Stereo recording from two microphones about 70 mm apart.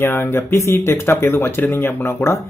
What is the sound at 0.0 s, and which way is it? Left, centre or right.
Speech, left.